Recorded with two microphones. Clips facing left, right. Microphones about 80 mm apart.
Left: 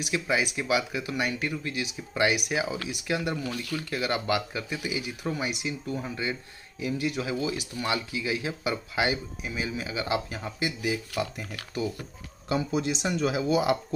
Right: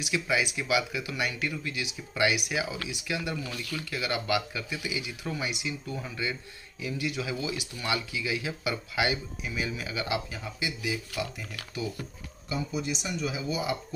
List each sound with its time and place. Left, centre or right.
0.0 s speech: left
6.8 s speech: left
12.4 s speech: left